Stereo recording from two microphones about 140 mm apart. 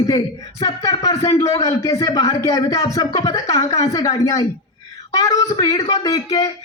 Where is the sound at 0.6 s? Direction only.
25° left (ahead or behind).